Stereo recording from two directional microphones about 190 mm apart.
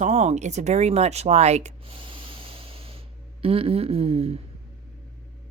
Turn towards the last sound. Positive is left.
turn(degrees=-30)  # may be behind; listen again after turning